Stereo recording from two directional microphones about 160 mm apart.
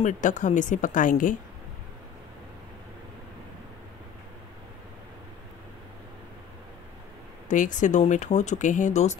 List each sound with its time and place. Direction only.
0.0 s speech: 50° left (ahead or behind)
7.4 s speech: 50° left (ahead or behind)